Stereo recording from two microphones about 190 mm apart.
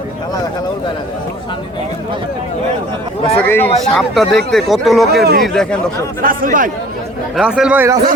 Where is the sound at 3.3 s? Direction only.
10° left (ahead or behind).